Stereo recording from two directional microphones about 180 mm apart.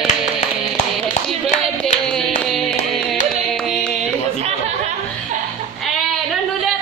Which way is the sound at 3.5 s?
5° left (ahead or behind).